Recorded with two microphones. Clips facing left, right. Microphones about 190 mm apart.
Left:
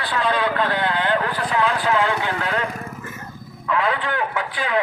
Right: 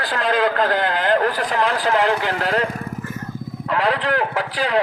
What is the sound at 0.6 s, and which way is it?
Speech, 40° right (ahead or behind).